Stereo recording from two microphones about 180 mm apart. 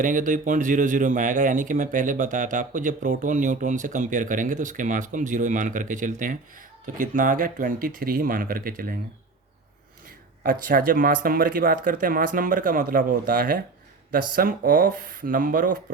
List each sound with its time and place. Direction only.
0.0 s speech: 45° right (ahead or behind)
10.4 s speech: 50° right (ahead or behind)